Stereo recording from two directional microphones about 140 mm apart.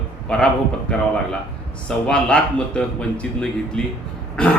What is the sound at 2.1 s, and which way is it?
A man's voice, 5° left (ahead or behind).